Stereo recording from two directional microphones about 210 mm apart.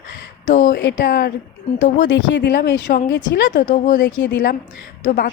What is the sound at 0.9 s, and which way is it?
Speech, 45° left (ahead or behind).